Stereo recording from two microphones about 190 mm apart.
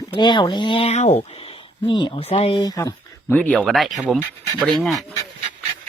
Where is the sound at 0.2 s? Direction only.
25° left (ahead or behind).